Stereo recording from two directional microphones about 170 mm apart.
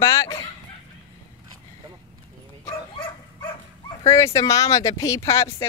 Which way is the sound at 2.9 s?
25° left (ahead or behind).